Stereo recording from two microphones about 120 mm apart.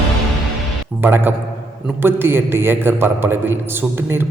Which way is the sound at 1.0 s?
15° right (ahead or behind).